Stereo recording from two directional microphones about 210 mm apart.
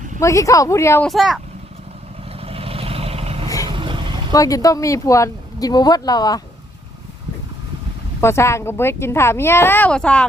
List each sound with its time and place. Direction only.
0.2 s speech: 15° left (ahead or behind)
1.0 s speech: centre (ahead or behind)
2.4 s vehicle: 25° right (ahead or behind)
4.3 s speech: 15° left (ahead or behind)
8.2 s speech: 10° left (ahead or behind)